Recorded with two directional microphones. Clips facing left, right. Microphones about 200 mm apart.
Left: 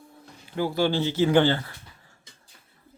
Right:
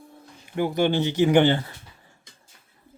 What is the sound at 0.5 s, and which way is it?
Speech, 20° right (ahead or behind).